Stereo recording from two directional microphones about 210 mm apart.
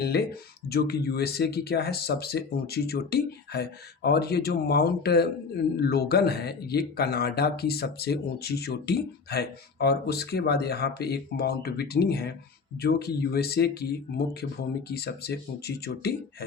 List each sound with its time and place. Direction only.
0.0 s speech: 50° left (ahead or behind)